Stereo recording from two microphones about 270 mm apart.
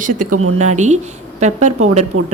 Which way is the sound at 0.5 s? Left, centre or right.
Right.